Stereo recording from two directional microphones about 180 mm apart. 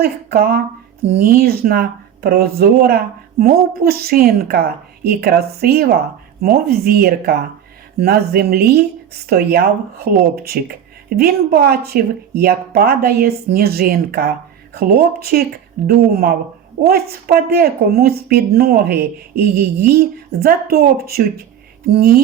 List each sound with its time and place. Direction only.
0.0 s speech: 60° right (ahead or behind)